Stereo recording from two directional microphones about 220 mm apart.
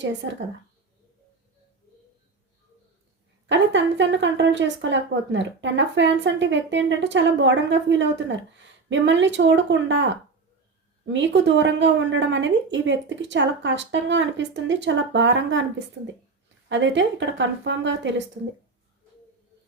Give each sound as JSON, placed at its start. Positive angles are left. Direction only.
{"t": 3.5, "sound": "speech", "side_deg": -55}
{"t": 16.6, "sound": "speech", "side_deg": -55}